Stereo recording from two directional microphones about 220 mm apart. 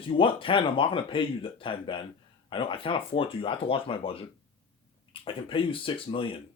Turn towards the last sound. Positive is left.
turn(degrees=25)  # may be behind; listen again after turning